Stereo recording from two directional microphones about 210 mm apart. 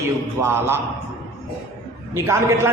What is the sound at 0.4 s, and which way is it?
Speech, 10° right (ahead or behind).